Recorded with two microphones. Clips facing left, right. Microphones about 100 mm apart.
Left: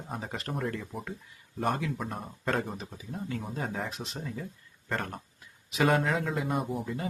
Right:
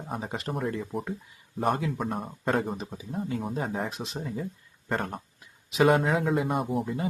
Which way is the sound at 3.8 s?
20° right (ahead or behind).